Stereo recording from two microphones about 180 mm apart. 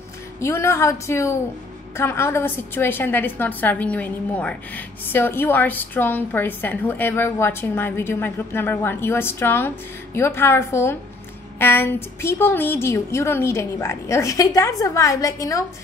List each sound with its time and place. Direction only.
0.4 s a woman's voice: 15° left (ahead or behind)